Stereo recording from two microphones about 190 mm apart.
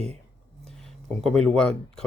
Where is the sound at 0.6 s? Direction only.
Centre (ahead or behind).